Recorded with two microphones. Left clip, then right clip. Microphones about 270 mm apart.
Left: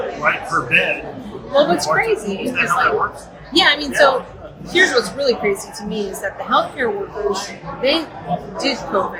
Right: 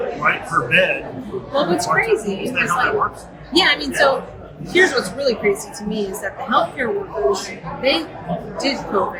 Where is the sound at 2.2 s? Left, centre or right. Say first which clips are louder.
Left 1 dB; centre.